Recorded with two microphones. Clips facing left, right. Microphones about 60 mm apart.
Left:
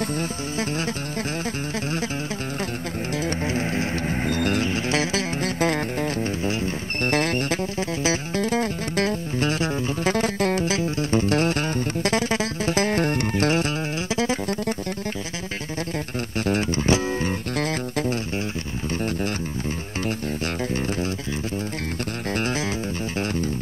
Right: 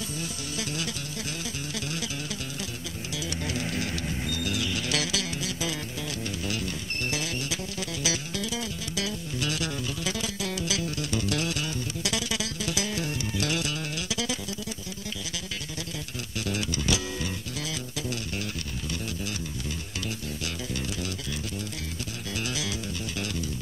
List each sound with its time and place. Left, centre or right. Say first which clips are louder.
0.2 s music: left 8 dB; left
3.3 s music: left 5 dB; left
5.4 s music: left 10 dB; left
6.4 s music: left 7 dB; left
7.1 s music: left 11 dB; left
16.4 s music: left 7 dB; left
17.6 s music: left 10 dB; left
22.3 s music: left 7 dB; left